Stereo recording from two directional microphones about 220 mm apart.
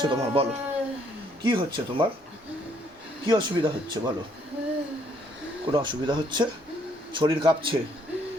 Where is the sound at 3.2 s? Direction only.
20° right (ahead or behind).